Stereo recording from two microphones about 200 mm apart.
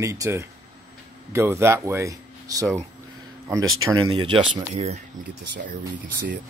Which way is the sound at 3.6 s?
90° right.